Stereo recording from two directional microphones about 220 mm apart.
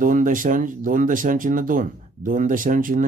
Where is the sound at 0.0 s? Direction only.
40° right (ahead or behind).